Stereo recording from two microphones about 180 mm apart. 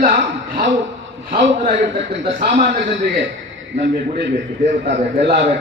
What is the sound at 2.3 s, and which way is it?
Speech, 50° right (ahead or behind).